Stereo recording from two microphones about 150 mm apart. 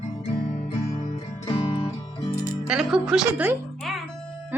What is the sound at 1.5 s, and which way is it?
Music, 35° left (ahead or behind).